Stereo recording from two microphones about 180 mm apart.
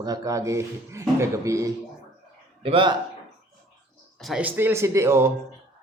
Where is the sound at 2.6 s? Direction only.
30° right (ahead or behind).